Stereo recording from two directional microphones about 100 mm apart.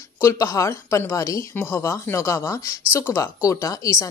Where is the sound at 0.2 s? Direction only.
30° left (ahead or behind).